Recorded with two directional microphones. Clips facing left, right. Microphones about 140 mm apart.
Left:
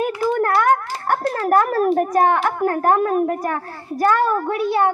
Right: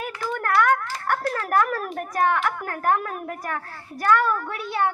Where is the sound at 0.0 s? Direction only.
25° left (ahead or behind).